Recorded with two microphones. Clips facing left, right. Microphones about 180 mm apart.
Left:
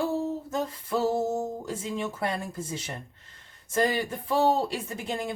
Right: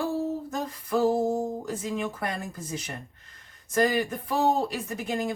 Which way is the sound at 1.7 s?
25° left (ahead or behind).